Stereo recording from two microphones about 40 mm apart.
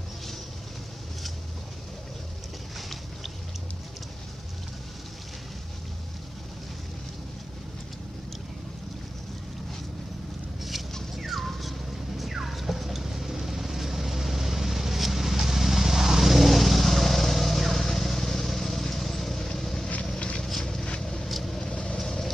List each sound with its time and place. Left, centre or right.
11.1 s dog: centre
12.2 s vehicle: centre
20.2 s vehicle: left
20.4 s a sound: centre
21.0 s vehicle: centre
21.3 s vehicle: centre
21.7 s vehicle: left